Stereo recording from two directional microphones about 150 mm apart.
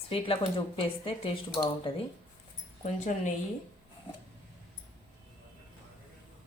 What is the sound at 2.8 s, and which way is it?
Speech, 55° left (ahead or behind).